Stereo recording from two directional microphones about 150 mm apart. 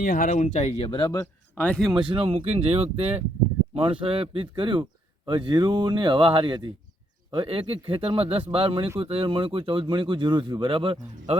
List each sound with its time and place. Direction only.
0.0 s speech: 65° left (ahead or behind); by 1.0 s 35° left (ahead or behind)
1.5 s speech: 10° left (ahead or behind)
2.0 s a man's voice: 35° right (ahead or behind)